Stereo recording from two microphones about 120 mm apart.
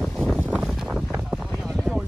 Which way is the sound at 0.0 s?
Centre (ahead or behind).